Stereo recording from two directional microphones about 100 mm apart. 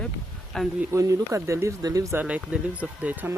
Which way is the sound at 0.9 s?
30° right (ahead or behind).